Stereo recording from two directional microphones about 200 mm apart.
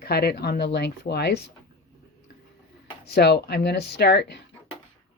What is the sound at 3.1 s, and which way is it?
Speech, 55° left (ahead or behind).